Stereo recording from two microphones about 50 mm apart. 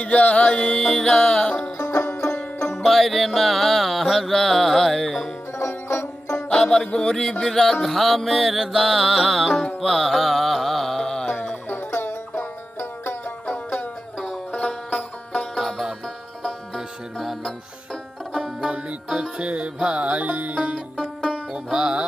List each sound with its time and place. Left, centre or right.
0.0 s music: left
0.8 s music: centre
2.7 s music: centre
5.5 s music: left
6.5 s music: centre
11.7 s music: left
13.5 s music: left
14.9 s music: centre
15.5 s music: centre
19.0 s music: centre
19.4 s music: right
20.7 s music: centre
21.5 s music: centre